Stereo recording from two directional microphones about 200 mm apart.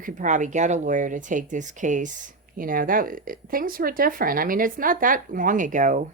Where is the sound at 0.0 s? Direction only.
40° right (ahead or behind).